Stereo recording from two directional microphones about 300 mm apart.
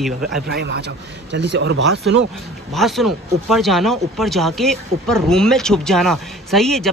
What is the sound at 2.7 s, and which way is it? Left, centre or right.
Speech, centre.